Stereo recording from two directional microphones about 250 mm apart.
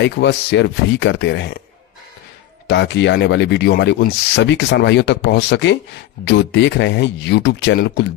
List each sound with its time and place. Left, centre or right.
0.0 s speech: left
2.7 s speech: left